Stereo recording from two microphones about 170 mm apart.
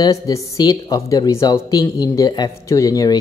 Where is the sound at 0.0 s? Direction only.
20° left (ahead or behind).